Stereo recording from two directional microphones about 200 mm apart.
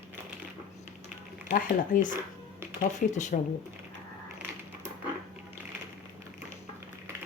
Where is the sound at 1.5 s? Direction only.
40° left (ahead or behind).